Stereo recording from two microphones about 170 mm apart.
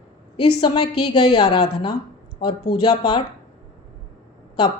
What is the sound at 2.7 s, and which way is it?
Speech, 25° left (ahead or behind).